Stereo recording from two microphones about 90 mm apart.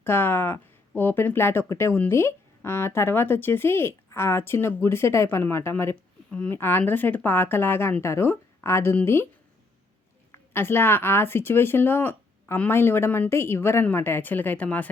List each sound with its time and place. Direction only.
0.0 s speech: 25° left (ahead or behind)
10.5 s speech: 25° left (ahead or behind)